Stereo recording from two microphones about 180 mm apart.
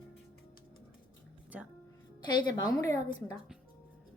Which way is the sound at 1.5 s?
10° right (ahead or behind).